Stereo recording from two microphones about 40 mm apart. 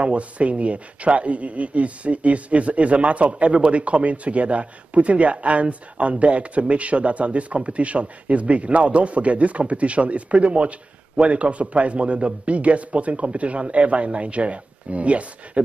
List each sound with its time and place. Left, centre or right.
0.0 s speech: right